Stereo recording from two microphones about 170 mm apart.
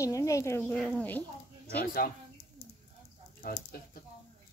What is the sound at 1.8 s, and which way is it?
Speech, 60° left (ahead or behind).